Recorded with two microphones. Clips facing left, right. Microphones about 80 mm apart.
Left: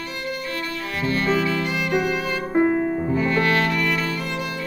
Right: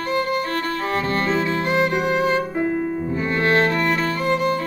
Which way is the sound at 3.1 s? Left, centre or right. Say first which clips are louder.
Right 2 dB; right.